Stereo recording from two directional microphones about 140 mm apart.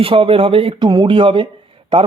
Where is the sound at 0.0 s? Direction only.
40° right (ahead or behind).